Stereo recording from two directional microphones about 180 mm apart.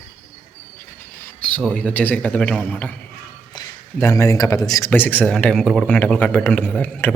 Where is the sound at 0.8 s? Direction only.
10° left (ahead or behind).